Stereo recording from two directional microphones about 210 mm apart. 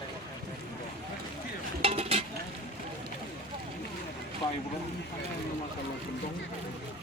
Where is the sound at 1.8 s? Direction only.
30° right (ahead or behind).